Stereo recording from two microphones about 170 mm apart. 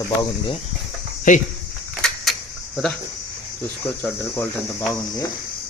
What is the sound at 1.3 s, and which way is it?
Speech, 50° left (ahead or behind).